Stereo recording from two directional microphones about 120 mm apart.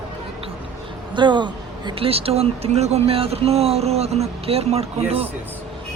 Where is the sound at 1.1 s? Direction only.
40° right (ahead or behind); by 5.2 s 60° right (ahead or behind).